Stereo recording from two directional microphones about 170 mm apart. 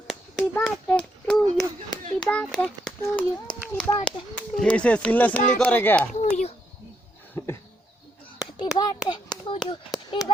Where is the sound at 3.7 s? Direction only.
25° left (ahead or behind).